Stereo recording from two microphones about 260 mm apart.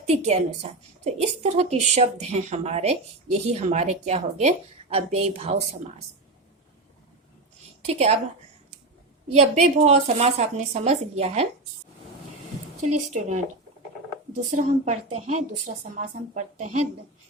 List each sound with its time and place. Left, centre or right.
0.1 s a woman's voice: right
7.9 s a woman's voice: right
9.3 s a woman's voice: right
13.1 s a woman's voice: right
14.5 s a woman's voice: right